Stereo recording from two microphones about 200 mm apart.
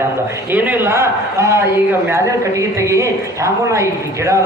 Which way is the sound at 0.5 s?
10° right (ahead or behind).